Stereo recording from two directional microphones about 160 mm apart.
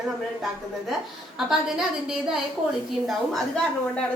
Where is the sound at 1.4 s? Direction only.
Centre (ahead or behind).